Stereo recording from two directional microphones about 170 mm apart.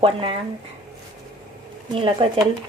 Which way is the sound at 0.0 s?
30° right (ahead or behind).